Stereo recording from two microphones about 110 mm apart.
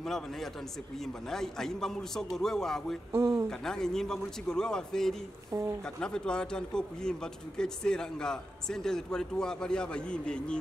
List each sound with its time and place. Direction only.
0.0 s a man's voice: 5° left (ahead or behind)
3.1 s speech: 25° right (ahead or behind)
3.4 s a man's voice: 5° left (ahead or behind)